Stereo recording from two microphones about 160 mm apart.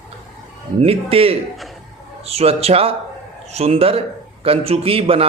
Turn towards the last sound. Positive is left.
turn(degrees=-35)  # may be behind; listen again after turning